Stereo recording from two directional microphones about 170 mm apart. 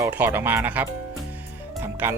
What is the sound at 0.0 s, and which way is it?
Speech, 15° right (ahead or behind).